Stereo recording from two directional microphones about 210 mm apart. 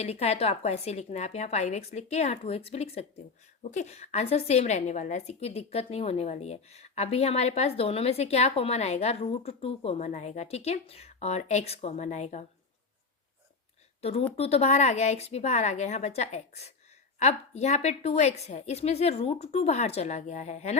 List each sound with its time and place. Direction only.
0.0 s a woman's voice: 30° left (ahead or behind)
14.0 s a woman's voice: 30° left (ahead or behind)